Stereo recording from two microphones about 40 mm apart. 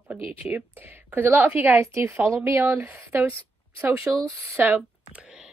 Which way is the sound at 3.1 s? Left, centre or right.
Right.